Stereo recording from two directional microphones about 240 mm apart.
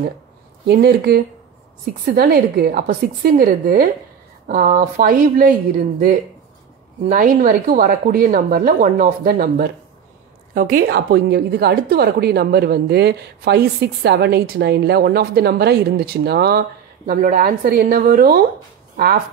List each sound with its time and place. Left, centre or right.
0.7 s a woman's voice: right
7.1 s a woman's voice: right